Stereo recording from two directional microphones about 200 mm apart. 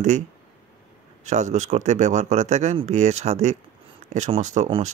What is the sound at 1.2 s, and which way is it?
Speech, 35° right (ahead or behind).